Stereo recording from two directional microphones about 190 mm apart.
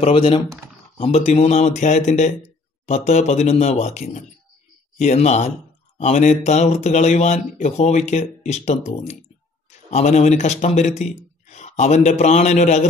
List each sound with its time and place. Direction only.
0.0 s a man's voice: 30° left (ahead or behind)